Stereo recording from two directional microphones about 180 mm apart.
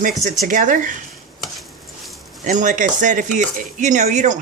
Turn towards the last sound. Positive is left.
turn(degrees=-40)  # may be behind; listen again after turning